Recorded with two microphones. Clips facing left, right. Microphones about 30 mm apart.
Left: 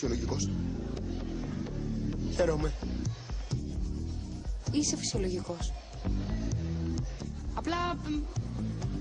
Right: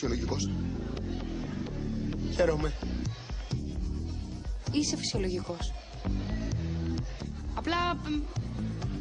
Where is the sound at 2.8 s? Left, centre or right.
Right.